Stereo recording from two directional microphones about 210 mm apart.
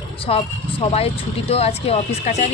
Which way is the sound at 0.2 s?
25° left (ahead or behind).